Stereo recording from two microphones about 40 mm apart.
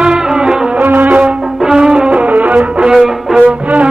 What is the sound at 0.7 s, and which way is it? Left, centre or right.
Music, right.